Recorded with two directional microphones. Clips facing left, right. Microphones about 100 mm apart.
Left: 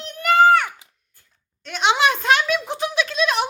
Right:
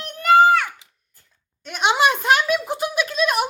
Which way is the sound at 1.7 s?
10° right (ahead or behind).